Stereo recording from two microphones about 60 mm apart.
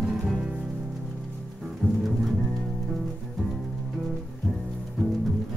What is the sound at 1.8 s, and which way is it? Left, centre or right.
Music, left.